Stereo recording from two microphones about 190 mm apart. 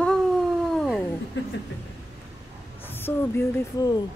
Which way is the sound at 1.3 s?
70° left (ahead or behind).